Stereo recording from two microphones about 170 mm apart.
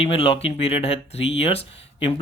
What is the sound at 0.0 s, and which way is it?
Speech, 35° left (ahead or behind).